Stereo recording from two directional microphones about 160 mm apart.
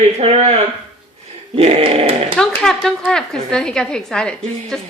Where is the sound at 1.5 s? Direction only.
35° right (ahead or behind).